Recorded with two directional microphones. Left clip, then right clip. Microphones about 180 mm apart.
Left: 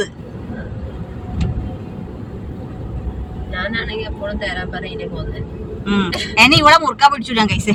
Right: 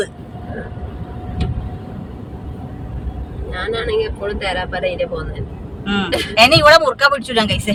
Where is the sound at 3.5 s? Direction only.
65° right (ahead or behind).